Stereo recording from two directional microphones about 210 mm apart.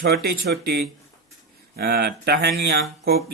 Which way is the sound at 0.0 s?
45° right (ahead or behind).